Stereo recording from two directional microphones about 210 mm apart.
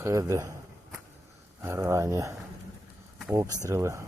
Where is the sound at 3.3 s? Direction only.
15° right (ahead or behind).